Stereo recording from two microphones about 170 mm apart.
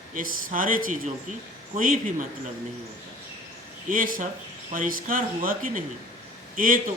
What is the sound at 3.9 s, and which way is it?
A man's voice, 55° right (ahead or behind).